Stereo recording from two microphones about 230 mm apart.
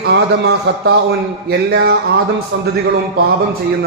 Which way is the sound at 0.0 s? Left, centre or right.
Right.